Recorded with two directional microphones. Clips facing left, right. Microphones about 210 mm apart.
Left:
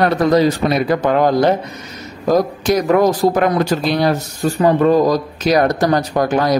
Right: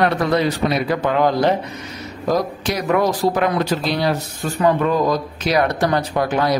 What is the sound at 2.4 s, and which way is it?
Speech, 45° left (ahead or behind).